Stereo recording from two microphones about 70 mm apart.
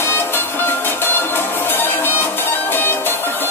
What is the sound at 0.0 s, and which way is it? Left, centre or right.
Music, left.